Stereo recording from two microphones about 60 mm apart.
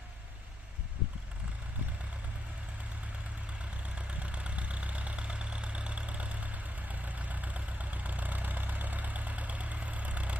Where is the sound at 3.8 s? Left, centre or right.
Right.